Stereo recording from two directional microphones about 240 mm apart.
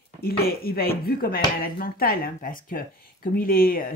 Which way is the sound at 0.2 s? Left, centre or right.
Left.